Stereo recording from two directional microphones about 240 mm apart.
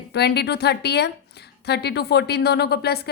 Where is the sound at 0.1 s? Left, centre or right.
Left.